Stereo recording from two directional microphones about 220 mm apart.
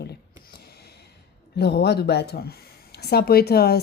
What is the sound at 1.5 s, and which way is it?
A woman's voice, 50° left (ahead or behind).